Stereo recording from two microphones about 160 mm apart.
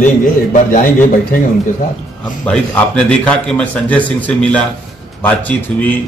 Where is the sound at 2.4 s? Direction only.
5° left (ahead or behind).